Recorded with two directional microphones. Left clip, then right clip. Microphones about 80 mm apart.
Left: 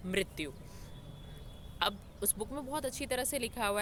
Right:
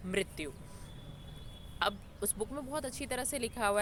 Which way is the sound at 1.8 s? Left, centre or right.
Left.